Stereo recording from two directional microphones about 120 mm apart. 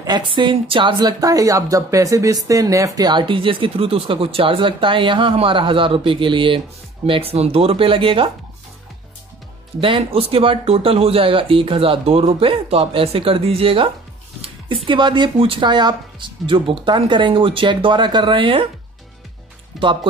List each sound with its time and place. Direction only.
0.0 s a woman's voice: 40° right (ahead or behind)
9.8 s a woman's voice: 50° right (ahead or behind)
14.9 s a woman's voice: 40° right (ahead or behind)
19.7 s speech: centre (ahead or behind)